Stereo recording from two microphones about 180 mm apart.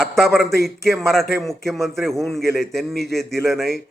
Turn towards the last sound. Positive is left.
turn(degrees=0)  # may be behind; listen again after turning